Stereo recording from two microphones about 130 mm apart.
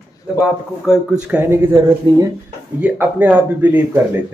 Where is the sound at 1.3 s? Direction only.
15° right (ahead or behind).